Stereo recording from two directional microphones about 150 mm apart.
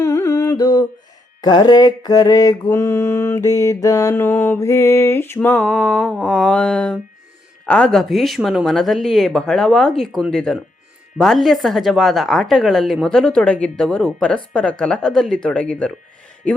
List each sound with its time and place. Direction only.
0.0 s music: 20° left (ahead or behind)
7.6 s speech: 5° left (ahead or behind)